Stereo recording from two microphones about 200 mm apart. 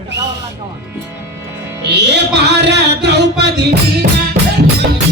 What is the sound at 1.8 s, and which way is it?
A man's voice, 55° right (ahead or behind).